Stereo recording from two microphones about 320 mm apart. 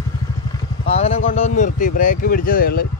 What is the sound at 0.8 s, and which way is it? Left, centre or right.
Vehicle, centre.